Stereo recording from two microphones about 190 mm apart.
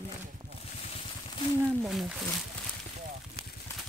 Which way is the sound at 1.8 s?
Centre (ahead or behind).